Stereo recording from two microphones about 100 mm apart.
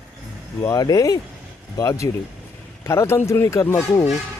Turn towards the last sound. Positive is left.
turn(degrees=30)  # may be behind; listen again after turning